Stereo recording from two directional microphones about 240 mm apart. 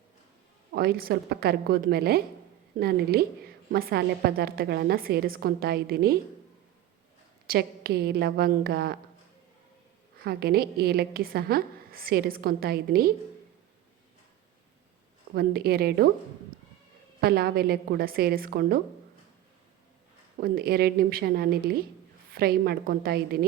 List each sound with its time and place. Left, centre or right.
0.7 s a woman's voice: right
7.4 s a woman's voice: right
10.2 s a woman's voice: right
15.4 s a woman's voice: right
17.2 s a woman's voice: right
20.4 s a woman's voice: right